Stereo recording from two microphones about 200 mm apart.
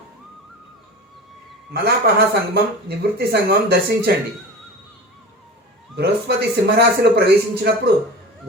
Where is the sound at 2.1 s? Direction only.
55° right (ahead or behind).